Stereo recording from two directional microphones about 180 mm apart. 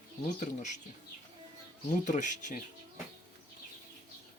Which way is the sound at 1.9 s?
45° left (ahead or behind).